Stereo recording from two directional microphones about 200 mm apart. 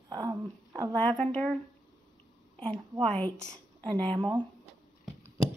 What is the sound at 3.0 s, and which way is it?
Speech, 5° left (ahead or behind).